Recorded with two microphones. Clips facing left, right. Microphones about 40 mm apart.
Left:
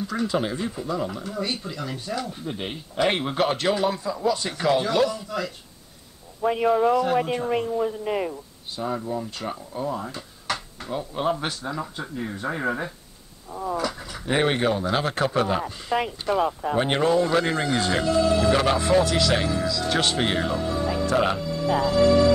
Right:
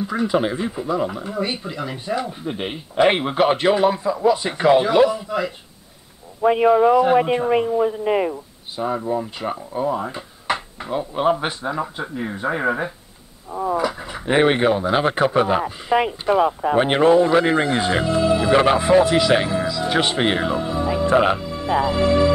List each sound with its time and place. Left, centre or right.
0.0 s speech: centre